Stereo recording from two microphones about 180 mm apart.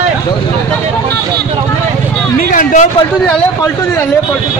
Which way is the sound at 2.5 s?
45° left (ahead or behind).